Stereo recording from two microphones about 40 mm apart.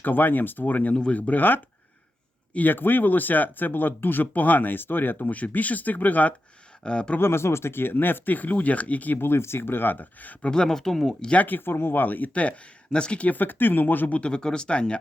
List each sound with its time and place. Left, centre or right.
0.0 s speech: left
2.6 s speech: left
5.2 s speech: left
6.8 s speech: left
7.2 s speech: left
9.1 s speech: left
10.4 s speech: centre
11.4 s speech: left
12.3 s speech: left
13.2 s speech: left
14.2 s speech: left